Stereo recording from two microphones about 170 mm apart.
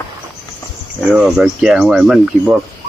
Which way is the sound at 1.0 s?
Centre (ahead or behind).